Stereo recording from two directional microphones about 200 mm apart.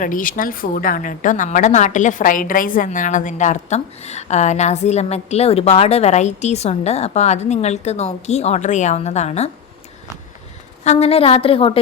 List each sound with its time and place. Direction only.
0.0 s a woman's voice: 40° left (ahead or behind)
10.8 s a woman's voice: 30° left (ahead or behind)